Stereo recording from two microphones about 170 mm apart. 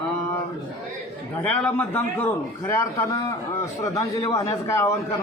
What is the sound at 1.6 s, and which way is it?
A man's voice, 10° left (ahead or behind).